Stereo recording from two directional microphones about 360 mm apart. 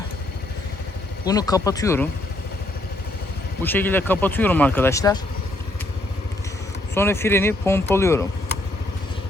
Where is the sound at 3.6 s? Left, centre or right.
Centre.